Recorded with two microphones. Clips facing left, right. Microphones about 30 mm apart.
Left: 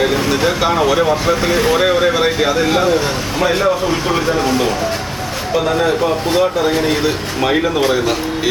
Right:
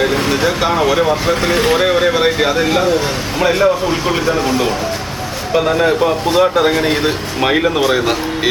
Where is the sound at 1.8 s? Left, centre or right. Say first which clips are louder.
Right 1 dB; centre.